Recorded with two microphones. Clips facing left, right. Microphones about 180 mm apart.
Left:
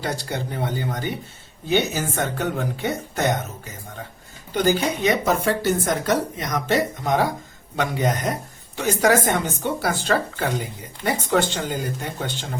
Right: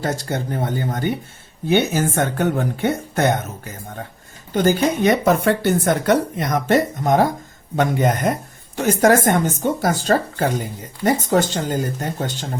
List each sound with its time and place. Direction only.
0.0 s speech: 45° right (ahead or behind)
4.5 s speech: 50° right (ahead or behind)